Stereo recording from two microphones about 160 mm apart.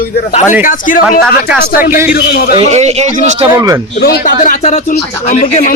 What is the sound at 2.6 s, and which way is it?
Speech, 45° right (ahead or behind).